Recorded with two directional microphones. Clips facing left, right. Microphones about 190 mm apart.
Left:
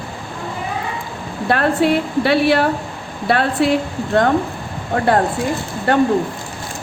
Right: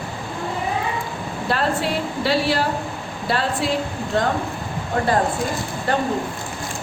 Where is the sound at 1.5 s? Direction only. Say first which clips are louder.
Left 7 dB; 60° left (ahead or behind).